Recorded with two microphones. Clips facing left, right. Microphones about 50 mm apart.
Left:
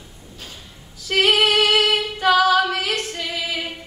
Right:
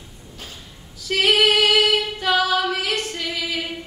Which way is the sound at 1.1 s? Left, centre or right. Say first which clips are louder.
Even; centre.